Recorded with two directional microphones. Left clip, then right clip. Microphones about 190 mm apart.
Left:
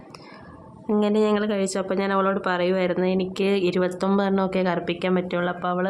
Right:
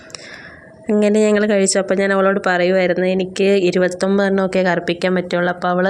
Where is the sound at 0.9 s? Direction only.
25° right (ahead or behind).